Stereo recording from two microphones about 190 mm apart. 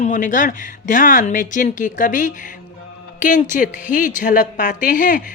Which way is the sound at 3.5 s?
40° left (ahead or behind).